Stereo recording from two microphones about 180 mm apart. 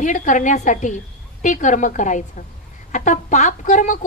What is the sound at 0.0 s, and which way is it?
A woman's voice, 45° left (ahead or behind).